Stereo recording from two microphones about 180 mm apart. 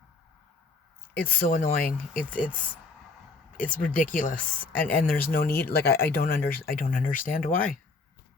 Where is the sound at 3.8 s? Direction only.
45° left (ahead or behind).